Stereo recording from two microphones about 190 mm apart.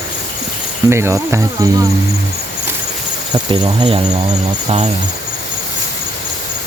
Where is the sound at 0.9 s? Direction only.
15° right (ahead or behind).